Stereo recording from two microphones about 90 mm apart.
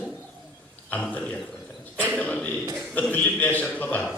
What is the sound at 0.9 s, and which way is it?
Speech, 20° left (ahead or behind).